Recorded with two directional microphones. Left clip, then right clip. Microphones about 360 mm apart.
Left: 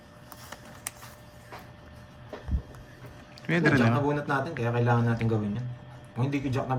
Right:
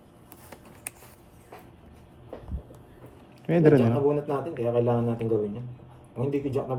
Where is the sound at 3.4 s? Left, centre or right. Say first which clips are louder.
Right 4 dB; centre.